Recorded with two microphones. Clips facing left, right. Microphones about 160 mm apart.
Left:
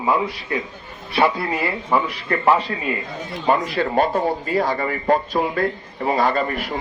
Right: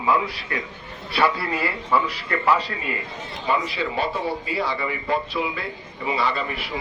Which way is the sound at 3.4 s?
50° left (ahead or behind).